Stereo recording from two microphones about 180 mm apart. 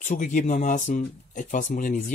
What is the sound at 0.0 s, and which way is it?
Speech, 45° left (ahead or behind).